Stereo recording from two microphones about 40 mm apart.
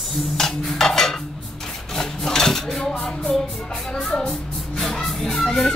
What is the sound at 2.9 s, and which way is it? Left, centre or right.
Music, left.